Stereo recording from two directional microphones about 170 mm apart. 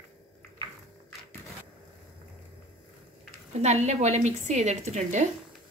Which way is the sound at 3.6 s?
40° right (ahead or behind).